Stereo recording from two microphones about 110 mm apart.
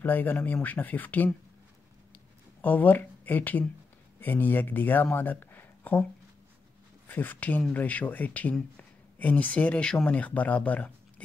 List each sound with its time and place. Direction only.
0.0 s speech: 15° left (ahead or behind)
2.6 s speech: 15° left (ahead or behind)
7.1 s speech: 15° left (ahead or behind)